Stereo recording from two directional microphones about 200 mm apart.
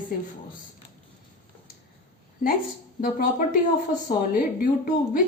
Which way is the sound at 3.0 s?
45° left (ahead or behind).